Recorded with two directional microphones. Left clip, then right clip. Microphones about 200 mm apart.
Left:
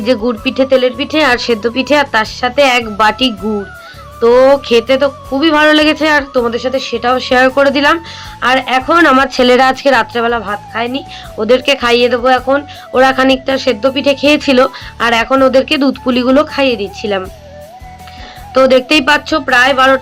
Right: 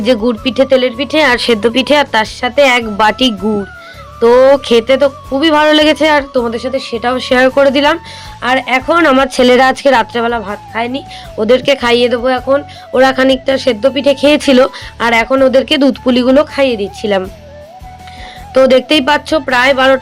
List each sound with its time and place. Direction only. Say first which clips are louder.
0.0 s speech: right 1 dB; 40° right (ahead or behind)
18.5 s speech: even; 45° right (ahead or behind)